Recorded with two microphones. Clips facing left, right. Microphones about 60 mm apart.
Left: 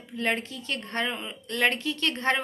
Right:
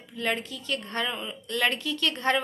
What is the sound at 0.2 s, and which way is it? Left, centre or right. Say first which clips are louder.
A woman's voice: left 1 dB; left.